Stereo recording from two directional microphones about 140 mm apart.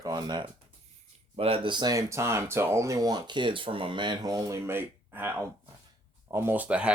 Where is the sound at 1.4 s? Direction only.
40° right (ahead or behind).